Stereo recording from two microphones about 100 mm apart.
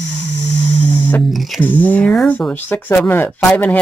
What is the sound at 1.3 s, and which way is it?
Speech, centre (ahead or behind).